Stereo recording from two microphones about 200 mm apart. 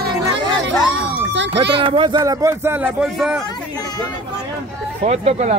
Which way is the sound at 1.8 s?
25° right (ahead or behind).